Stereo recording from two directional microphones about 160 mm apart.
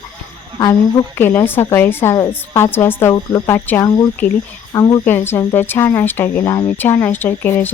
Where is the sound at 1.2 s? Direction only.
15° left (ahead or behind).